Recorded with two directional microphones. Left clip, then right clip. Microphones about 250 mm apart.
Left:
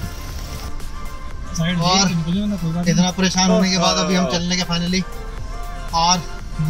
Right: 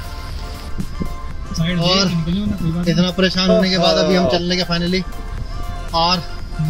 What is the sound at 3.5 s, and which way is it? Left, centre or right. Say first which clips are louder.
Speech: right 3 dB; centre.